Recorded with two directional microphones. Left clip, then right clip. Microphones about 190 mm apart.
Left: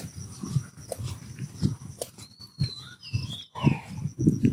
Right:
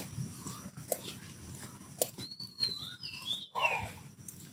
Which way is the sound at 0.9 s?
10° right (ahead or behind).